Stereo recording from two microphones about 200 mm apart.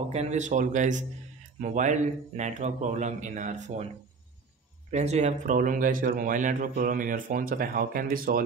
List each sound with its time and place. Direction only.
0.1 s speech: 35° right (ahead or behind)
4.9 s a man's voice: 35° right (ahead or behind)